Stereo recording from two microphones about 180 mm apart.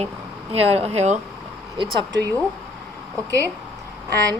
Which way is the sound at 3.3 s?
15° right (ahead or behind).